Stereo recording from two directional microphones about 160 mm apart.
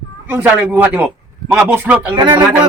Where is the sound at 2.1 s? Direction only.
30° right (ahead or behind).